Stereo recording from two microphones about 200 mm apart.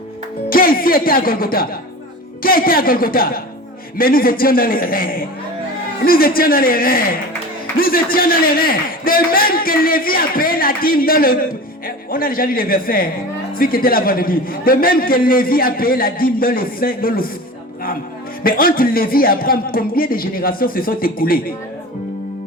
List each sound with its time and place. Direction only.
0.5 s a man's voice: 45° left (ahead or behind)
18.4 s a man's voice: 45° left (ahead or behind)